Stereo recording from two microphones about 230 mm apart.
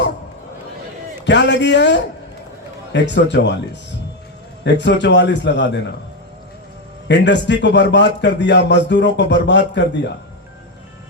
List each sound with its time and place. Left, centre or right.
1.2 s a man's voice: left
4.6 s a man's voice: left
7.1 s a man's voice: left